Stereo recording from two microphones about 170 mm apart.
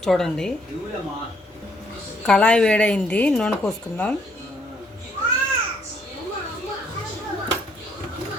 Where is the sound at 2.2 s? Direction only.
5° left (ahead or behind).